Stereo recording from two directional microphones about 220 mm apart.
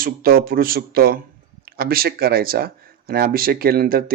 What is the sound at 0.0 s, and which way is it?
A man's voice, 40° right (ahead or behind).